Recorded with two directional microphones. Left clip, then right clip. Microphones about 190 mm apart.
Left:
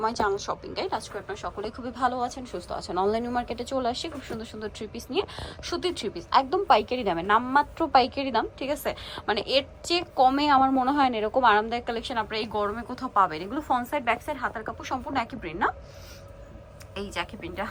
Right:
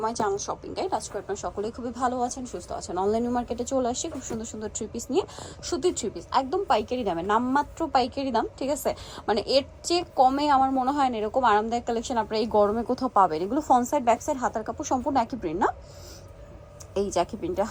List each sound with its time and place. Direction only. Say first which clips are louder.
0.0 s a woman's voice: left 1 dB; 15° right (ahead or behind)
16.9 s a woman's voice: right 7 dB; 35° right (ahead or behind)
17.6 s speech: right 4 dB; 20° right (ahead or behind)